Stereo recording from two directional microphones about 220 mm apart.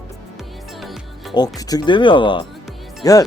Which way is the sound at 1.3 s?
15° left (ahead or behind).